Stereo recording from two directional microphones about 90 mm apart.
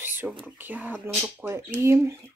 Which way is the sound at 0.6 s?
20° right (ahead or behind).